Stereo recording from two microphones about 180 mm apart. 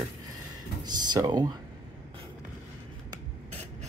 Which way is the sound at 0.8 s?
25° right (ahead or behind).